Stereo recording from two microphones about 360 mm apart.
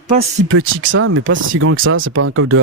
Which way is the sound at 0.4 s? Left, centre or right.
Right.